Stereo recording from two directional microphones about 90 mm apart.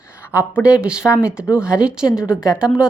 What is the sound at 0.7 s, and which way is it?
A woman's voice, 10° right (ahead or behind).